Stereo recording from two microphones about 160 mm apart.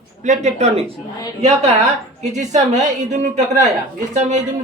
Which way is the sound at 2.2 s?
45° right (ahead or behind).